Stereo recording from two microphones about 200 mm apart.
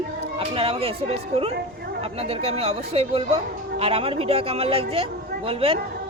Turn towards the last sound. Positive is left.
turn(degrees=-30)  # may be behind; listen again after turning